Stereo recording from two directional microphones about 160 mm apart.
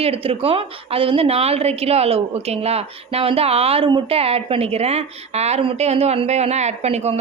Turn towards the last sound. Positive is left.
turn(degrees=-40)  # may be behind; listen again after turning